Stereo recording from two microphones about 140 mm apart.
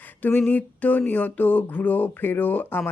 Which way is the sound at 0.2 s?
10° left (ahead or behind).